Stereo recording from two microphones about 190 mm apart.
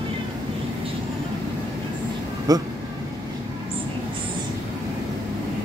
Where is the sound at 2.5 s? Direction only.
20° right (ahead or behind).